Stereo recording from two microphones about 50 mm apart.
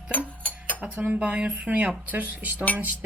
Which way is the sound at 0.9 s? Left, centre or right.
Right.